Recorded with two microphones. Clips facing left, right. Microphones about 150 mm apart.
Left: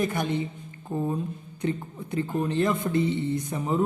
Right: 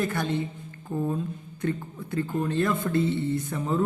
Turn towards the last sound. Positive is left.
turn(degrees=15)  # may be behind; listen again after turning